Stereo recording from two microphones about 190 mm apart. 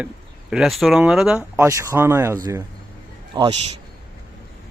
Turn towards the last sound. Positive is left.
turn(degrees=-20)  # may be behind; listen again after turning